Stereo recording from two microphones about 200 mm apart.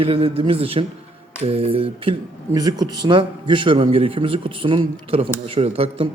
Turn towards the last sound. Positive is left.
turn(degrees=-30)  # may be behind; listen again after turning